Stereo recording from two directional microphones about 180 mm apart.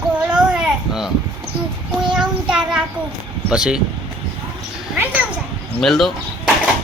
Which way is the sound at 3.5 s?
5° right (ahead or behind).